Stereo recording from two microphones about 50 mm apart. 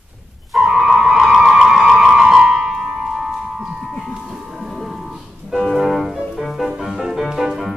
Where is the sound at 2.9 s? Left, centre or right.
Centre.